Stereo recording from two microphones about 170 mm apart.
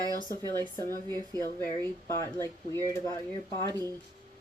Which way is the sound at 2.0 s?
15° left (ahead or behind).